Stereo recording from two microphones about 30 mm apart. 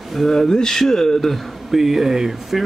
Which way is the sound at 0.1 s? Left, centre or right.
Centre.